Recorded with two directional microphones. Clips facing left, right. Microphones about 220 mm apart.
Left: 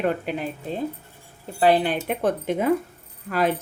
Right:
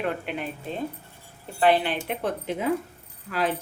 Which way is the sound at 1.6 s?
40° left (ahead or behind).